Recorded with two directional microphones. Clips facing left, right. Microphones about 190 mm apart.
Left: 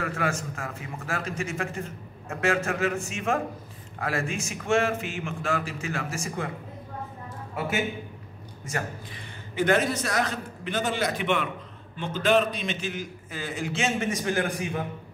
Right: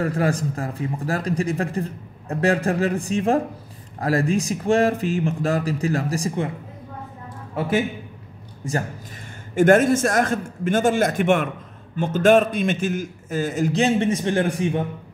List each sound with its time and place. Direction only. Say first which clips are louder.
0.0 s speech: right 7 dB; 35° right (ahead or behind)
9.6 s a man's voice: right 9 dB; 50° right (ahead or behind); by 14.9 s 30° right (ahead or behind)